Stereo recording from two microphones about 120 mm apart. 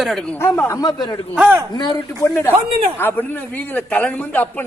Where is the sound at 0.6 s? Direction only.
30° left (ahead or behind).